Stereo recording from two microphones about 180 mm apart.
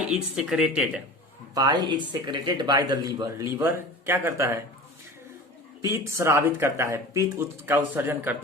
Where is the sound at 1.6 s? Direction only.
25° right (ahead or behind).